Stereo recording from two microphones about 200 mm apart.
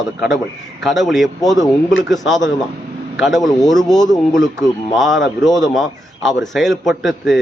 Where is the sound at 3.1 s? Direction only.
Centre (ahead or behind).